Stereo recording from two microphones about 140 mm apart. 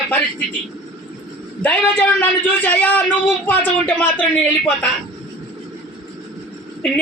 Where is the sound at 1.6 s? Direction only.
10° left (ahead or behind).